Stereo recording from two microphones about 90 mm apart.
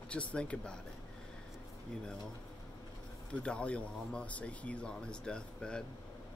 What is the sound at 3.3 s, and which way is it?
Speech, 15° left (ahead or behind).